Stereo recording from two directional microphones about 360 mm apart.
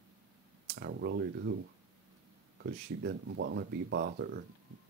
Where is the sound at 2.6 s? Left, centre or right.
Right.